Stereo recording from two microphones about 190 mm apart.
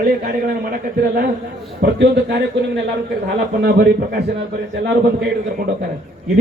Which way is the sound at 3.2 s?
55° right (ahead or behind).